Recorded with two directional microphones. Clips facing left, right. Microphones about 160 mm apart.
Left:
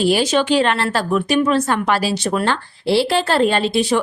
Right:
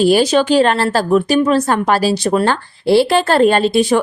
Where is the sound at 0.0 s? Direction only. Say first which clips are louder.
Right 4 dB; 40° right (ahead or behind).